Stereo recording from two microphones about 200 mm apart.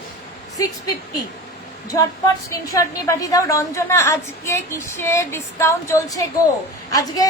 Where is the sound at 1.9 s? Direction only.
15° left (ahead or behind).